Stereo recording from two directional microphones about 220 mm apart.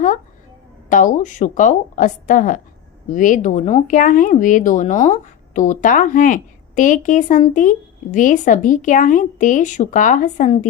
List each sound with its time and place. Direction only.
0.9 s speech: 35° left (ahead or behind)